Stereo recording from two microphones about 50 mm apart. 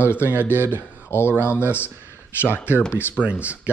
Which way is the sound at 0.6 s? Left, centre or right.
Left.